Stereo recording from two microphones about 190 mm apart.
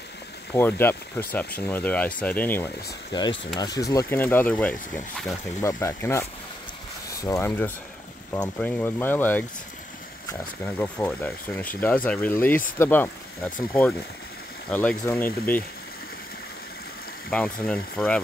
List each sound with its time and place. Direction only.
0.5 s speech: 10° left (ahead or behind)
3.1 s speech: 20° left (ahead or behind)
7.2 s speech: 15° left (ahead or behind)
10.6 s speech: 10° left (ahead or behind)
14.7 s speech: 10° left (ahead or behind)
17.3 s speech: 5° left (ahead or behind)